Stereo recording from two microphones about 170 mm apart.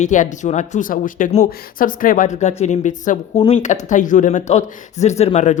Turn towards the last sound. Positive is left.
turn(degrees=40)  # may be behind; listen again after turning